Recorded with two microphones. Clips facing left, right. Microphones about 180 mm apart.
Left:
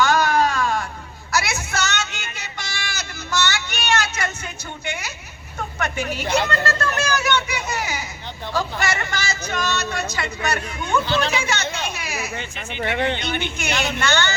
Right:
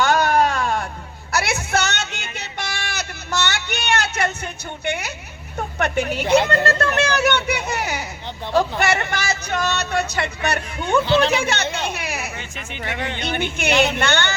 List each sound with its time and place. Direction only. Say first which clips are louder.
0.0 s a sound: right 1 dB; 60° right (ahead or behind)
1.7 s child singing: right 3 dB; 60° right (ahead or behind)
4.9 s a sound: right 6 dB; 60° right (ahead or behind)
11.0 s speech: right 5 dB; 25° right (ahead or behind)
11.3 s chatter: right 3 dB; 60° right (ahead or behind)
12.5 s speech: left 5 dB; 30° left (ahead or behind)
13.6 s speech: right 9 dB; 60° right (ahead or behind)